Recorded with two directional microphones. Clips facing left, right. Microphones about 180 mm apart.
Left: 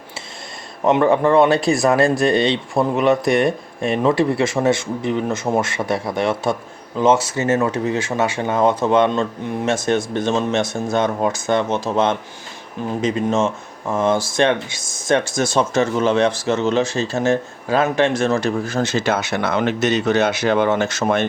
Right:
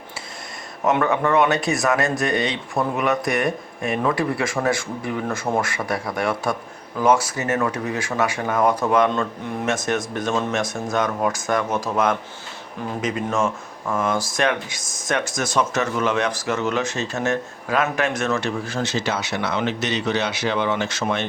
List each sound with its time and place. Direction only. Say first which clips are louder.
0.9 s speech: left 5 dB; 30° left (ahead or behind); by 21.2 s 45° left (ahead or behind)